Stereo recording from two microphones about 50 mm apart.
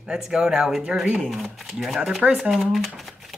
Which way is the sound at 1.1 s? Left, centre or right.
Centre.